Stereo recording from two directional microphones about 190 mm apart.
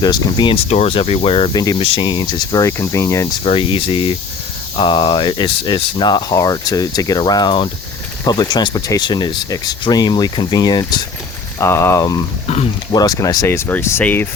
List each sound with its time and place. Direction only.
0.0 s speech: 20° left (ahead or behind)
3.4 s speech: 25° left (ahead or behind); by 14.3 s 10° left (ahead or behind)